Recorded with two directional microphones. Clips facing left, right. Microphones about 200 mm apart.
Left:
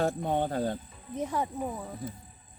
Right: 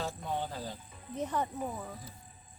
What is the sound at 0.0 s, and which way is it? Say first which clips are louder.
Insect: left 8 dB; 60° left (ahead or behind).